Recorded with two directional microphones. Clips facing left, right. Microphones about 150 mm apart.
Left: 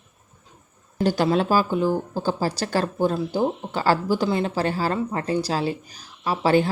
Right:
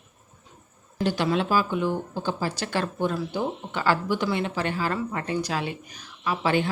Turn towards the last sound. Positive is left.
turn(degrees=35)  # may be behind; listen again after turning